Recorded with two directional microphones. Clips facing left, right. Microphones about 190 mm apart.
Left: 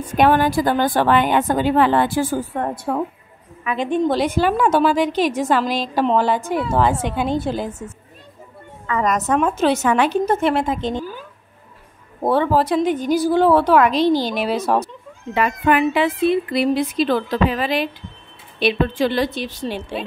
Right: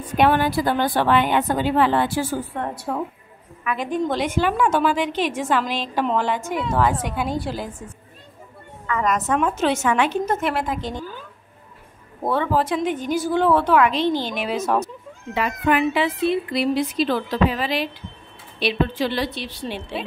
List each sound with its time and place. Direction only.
0.0 s a woman's voice: 45° left (ahead or behind)
3.6 s a woman's voice: 25° left (ahead or behind)
8.8 s a woman's voice: 35° left (ahead or behind)
12.2 s a woman's voice: 30° left (ahead or behind)
15.3 s a woman's voice: 55° left (ahead or behind)